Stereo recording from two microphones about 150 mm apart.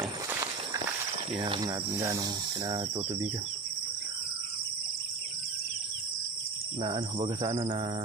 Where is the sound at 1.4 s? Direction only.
35° right (ahead or behind).